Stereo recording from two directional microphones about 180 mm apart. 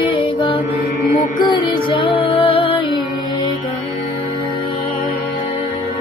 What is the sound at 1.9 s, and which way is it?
Music, 30° left (ahead or behind).